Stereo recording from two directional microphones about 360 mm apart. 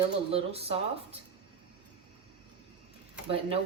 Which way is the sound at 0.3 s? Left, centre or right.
Centre.